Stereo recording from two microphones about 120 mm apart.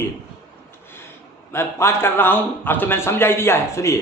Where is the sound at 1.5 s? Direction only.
20° left (ahead or behind).